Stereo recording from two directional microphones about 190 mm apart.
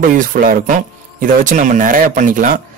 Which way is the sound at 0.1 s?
45° right (ahead or behind).